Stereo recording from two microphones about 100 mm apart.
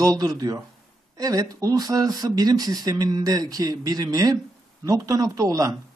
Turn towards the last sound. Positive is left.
turn(degrees=-35)  # may be behind; listen again after turning